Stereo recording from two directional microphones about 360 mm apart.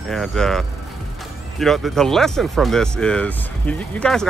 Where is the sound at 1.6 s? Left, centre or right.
Centre.